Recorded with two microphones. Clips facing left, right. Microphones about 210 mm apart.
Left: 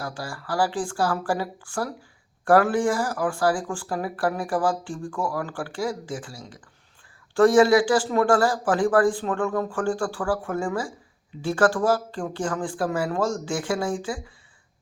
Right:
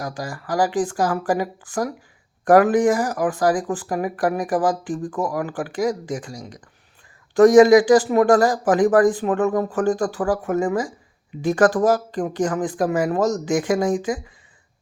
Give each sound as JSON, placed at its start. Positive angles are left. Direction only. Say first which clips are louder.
{"t": 0.0, "sound": "speech", "louder": "right 4 dB", "side_deg": -15}